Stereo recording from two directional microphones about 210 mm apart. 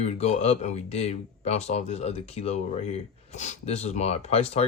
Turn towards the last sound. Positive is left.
turn(degrees=30)  # may be behind; listen again after turning